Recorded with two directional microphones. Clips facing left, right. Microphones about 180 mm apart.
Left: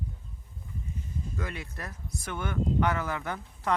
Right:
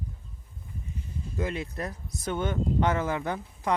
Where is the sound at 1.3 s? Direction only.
20° right (ahead or behind).